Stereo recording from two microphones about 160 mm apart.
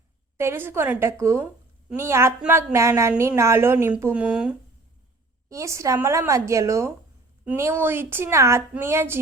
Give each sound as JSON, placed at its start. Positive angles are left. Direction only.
{"t": 0.3, "sound": "a woman's voice", "side_deg": -15}
{"t": 5.5, "sound": "a woman's voice", "side_deg": -20}